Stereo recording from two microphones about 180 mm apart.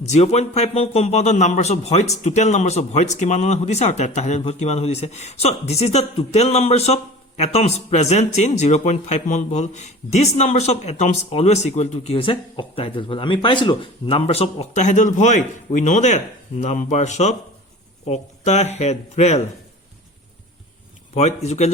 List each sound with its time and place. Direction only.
0.1 s a man's voice: 40° left (ahead or behind)
21.2 s a man's voice: 40° left (ahead or behind)